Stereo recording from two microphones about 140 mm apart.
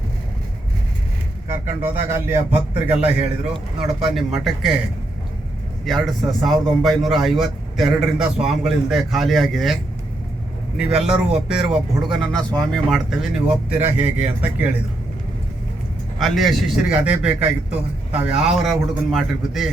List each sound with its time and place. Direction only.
1.5 s a man's voice: 15° right (ahead or behind)
5.8 s a man's voice: centre (ahead or behind)
10.8 s a man's voice: 5° right (ahead or behind)
13.9 s speech: 10° right (ahead or behind)
16.2 s a man's voice: centre (ahead or behind)